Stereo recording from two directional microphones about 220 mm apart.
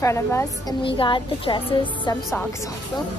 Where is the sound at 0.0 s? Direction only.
10° left (ahead or behind).